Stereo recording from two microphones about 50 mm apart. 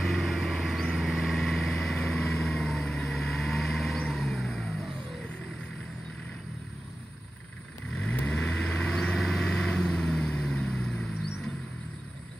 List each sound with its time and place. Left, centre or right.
0.0 s vehicle: centre
8.3 s vehicle: centre